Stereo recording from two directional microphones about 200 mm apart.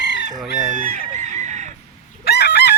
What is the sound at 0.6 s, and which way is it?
Chicken, 40° right (ahead or behind).